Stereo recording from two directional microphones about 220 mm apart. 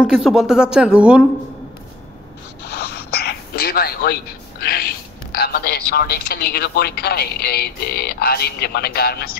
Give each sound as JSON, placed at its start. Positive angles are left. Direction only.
{"t": 0.0, "sound": "speech", "side_deg": 0}
{"t": 2.6, "sound": "a sound", "side_deg": 50}
{"t": 5.3, "sound": "a woman's voice", "side_deg": 45}